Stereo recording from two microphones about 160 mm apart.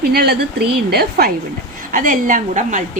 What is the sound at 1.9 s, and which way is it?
Speech, 55° right (ahead or behind).